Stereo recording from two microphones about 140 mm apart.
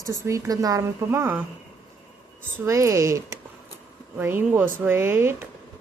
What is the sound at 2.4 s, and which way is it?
Speech, 20° right (ahead or behind).